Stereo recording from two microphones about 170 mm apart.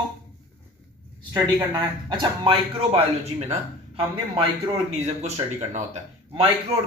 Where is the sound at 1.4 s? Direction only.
25° right (ahead or behind); by 5.3 s 40° right (ahead or behind).